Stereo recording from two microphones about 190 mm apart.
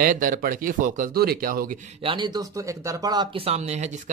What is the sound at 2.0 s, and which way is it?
Speech, 25° right (ahead or behind).